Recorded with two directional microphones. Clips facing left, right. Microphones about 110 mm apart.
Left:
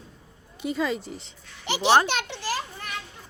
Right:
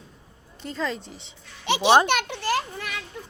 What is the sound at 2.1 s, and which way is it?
Speech, 55° right (ahead or behind).